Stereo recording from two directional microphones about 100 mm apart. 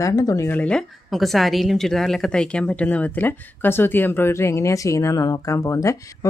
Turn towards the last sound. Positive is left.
turn(degrees=30)  # may be behind; listen again after turning